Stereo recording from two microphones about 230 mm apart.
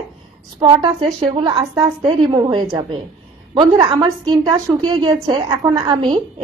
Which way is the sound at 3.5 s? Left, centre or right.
Right.